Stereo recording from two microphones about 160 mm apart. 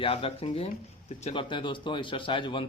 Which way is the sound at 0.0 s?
35° left (ahead or behind).